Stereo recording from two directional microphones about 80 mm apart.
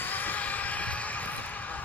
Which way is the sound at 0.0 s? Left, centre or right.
Left.